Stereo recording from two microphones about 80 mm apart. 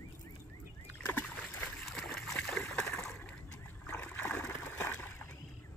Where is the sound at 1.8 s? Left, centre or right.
Centre.